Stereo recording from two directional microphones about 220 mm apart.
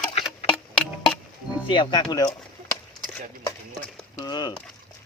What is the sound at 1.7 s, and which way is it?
Speech, 20° left (ahead or behind).